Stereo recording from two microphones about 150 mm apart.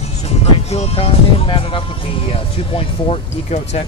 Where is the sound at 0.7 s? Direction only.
40° left (ahead or behind).